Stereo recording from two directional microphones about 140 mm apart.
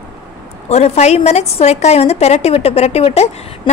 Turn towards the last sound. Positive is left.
turn(degrees=50)  # may be behind; listen again after turning